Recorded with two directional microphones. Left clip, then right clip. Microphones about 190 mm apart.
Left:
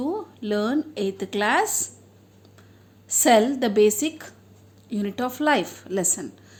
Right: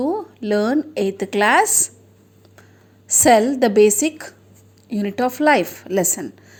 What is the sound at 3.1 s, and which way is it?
A woman's voice, 30° right (ahead or behind).